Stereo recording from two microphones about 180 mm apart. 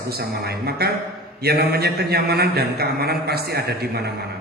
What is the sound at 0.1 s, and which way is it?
A man's voice, 60° right (ahead or behind).